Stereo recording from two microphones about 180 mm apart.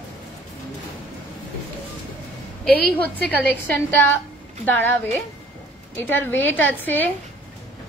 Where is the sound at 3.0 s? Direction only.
5° left (ahead or behind).